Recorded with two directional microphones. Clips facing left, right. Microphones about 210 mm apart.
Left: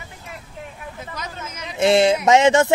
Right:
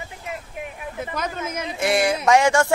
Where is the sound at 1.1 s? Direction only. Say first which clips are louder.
Right 6 dB; 55° right (ahead or behind).